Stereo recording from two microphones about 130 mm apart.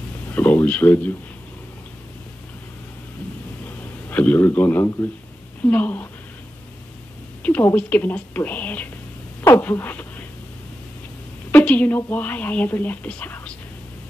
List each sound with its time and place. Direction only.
0.3 s speech: 15° left (ahead or behind)
4.1 s speech: 15° left (ahead or behind)
7.4 s speech: 10° left (ahead or behind)
11.5 s speech: 10° left (ahead or behind)